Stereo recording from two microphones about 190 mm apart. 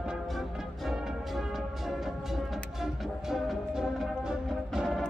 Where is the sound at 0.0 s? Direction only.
Centre (ahead or behind).